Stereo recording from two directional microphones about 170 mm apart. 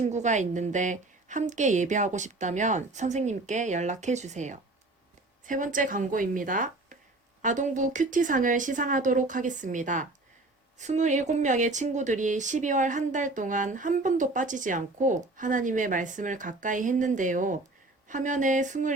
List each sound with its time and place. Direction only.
0.0 s speech: 45° right (ahead or behind)